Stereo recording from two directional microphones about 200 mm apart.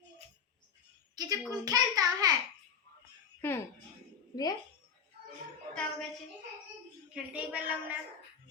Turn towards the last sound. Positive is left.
turn(degrees=-5)  # may be behind; listen again after turning